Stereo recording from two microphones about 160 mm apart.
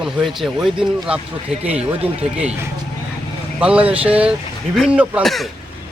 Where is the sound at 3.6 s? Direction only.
5° right (ahead or behind).